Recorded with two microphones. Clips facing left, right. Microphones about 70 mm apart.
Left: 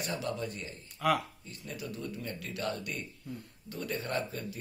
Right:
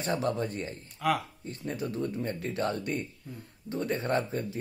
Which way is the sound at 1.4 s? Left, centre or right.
Right.